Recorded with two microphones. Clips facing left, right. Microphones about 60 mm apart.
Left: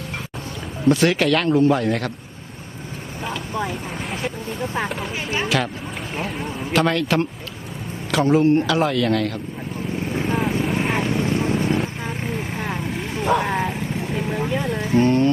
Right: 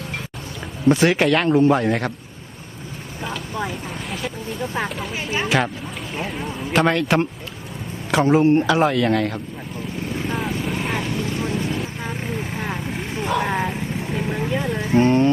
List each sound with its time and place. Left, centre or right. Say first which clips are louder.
0.9 s speech: right 1 dB; centre
3.2 s speech: left 1 dB; centre
6.7 s speech: right 1 dB; centre
10.2 s vehicle: left 3 dB; centre
10.9 s vehicle: left 3 dB; left
12.0 s vehicle: even; centre
15.0 s music: right 1 dB; right